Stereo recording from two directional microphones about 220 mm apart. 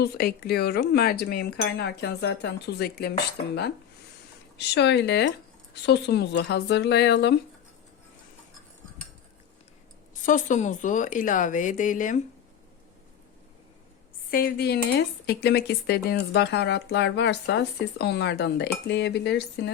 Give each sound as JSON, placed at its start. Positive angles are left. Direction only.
{"t": 0.0, "sound": "speech", "side_deg": 45}
{"t": 4.5, "sound": "speech", "side_deg": 50}
{"t": 10.2, "sound": "a woman's voice", "side_deg": 35}
{"t": 14.3, "sound": "speech", "side_deg": 45}